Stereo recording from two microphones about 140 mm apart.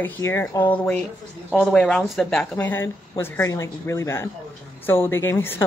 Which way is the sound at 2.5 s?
15° left (ahead or behind).